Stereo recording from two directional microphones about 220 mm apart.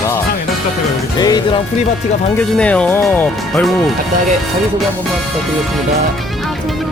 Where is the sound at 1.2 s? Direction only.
15° left (ahead or behind).